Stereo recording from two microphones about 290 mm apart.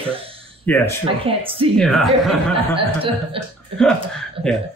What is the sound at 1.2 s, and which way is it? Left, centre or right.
Speech, centre.